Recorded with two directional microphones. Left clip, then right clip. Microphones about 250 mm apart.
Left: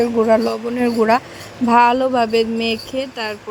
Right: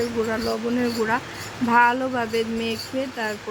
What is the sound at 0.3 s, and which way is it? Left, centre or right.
Speech, left.